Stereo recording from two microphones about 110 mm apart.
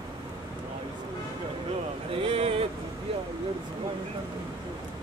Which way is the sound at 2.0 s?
60° right (ahead or behind).